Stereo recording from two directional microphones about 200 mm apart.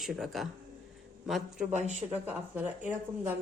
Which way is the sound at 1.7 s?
35° right (ahead or behind).